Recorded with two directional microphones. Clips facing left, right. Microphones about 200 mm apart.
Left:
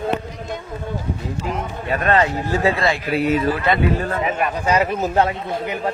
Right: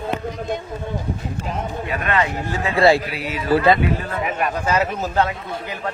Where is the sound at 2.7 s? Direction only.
30° right (ahead or behind).